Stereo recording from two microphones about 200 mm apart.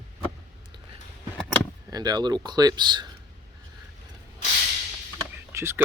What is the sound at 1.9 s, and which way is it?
Speech, 20° right (ahead or behind).